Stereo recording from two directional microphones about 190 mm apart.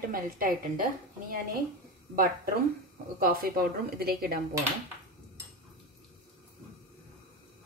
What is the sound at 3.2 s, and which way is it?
A woman's voice, 50° right (ahead or behind).